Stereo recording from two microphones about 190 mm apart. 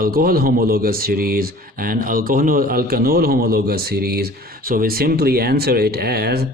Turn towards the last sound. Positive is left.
turn(degrees=-55)  # may be behind; listen again after turning